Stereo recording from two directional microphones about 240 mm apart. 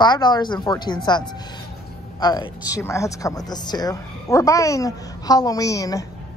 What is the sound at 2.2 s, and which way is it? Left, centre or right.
Speech, centre.